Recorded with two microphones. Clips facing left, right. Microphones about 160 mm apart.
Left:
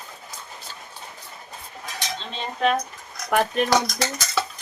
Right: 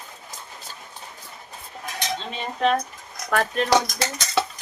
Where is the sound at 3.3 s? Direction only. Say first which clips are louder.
Left 2 dB; 15° left (ahead or behind).